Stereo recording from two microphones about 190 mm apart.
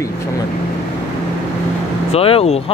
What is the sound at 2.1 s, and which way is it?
Speech, 30° left (ahead or behind).